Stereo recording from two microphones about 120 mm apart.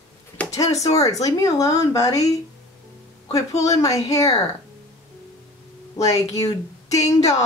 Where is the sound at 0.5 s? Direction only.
30° left (ahead or behind).